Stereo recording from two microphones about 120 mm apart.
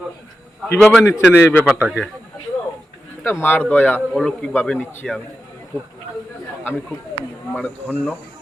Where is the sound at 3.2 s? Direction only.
20° left (ahead or behind).